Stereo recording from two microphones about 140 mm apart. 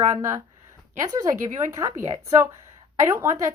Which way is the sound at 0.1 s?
20° right (ahead or behind).